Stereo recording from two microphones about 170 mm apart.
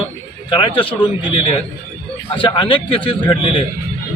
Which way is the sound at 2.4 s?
30° left (ahead or behind).